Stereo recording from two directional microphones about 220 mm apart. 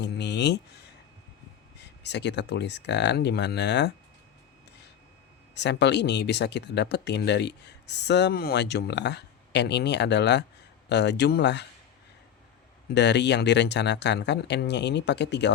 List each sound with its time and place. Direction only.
0.0 s speech: 50° left (ahead or behind)
1.8 s speech: 50° left (ahead or behind)
5.5 s speech: 50° left (ahead or behind)
12.9 s speech: 50° left (ahead or behind)